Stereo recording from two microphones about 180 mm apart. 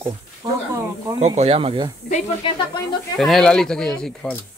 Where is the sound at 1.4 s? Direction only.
30° right (ahead or behind).